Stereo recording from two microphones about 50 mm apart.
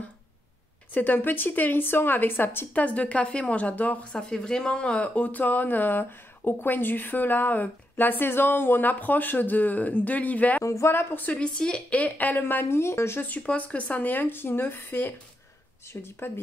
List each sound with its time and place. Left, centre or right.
0.9 s speech: left
2.7 s speech: left
4.1 s speech: centre; by 10.6 s left
10.6 s speech: left
10.9 s a woman's voice: left
11.2 s speech: left
12.6 s speech: left
13.2 s a woman's voice: left